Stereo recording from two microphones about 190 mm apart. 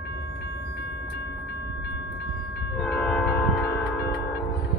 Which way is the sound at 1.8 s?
65° left (ahead or behind).